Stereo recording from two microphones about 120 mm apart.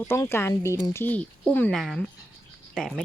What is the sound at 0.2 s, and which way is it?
Speech, 20° left (ahead or behind).